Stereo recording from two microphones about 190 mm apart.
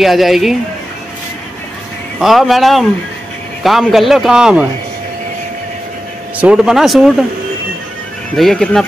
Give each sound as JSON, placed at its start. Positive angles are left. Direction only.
{"t": 0.0, "sound": "a man's voice", "side_deg": 0}
{"t": 2.1, "sound": "a man's voice", "side_deg": 0}
{"t": 6.3, "sound": "a man's voice", "side_deg": -5}
{"t": 8.4, "sound": "a man's voice", "side_deg": 0}